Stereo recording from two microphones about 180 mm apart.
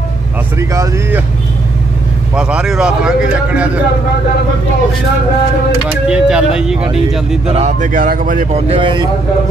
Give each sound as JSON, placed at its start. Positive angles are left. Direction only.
{"t": 0.6, "sound": "speech", "side_deg": -15}
{"t": 2.3, "sound": "speech", "side_deg": -5}
{"t": 6.0, "sound": "speech", "side_deg": -5}
{"t": 7.4, "sound": "speech", "side_deg": -40}
{"t": 8.6, "sound": "speech", "side_deg": -25}